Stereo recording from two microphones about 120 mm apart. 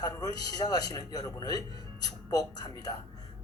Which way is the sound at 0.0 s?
35° left (ahead or behind).